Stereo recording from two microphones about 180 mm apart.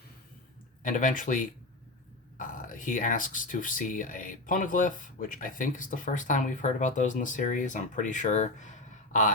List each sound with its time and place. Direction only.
0.8 s speech: 45° left (ahead or behind)